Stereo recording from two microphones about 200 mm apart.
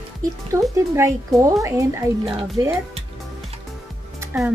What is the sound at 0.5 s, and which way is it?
Speech, 15° right (ahead or behind).